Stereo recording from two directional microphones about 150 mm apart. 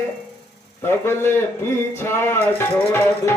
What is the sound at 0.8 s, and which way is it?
Speech, 15° left (ahead or behind).